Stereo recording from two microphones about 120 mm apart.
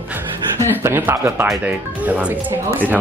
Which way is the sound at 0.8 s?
20° right (ahead or behind).